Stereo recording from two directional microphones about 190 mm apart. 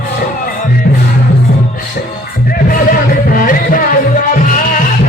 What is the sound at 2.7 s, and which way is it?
Music, 50° left (ahead or behind).